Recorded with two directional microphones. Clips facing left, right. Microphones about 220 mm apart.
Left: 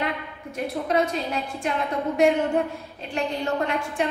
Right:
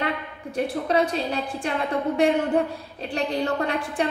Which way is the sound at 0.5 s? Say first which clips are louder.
Right 2 dB; 35° right (ahead or behind).